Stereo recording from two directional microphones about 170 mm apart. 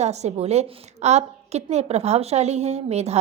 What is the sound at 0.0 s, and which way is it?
A woman's voice, 40° right (ahead or behind).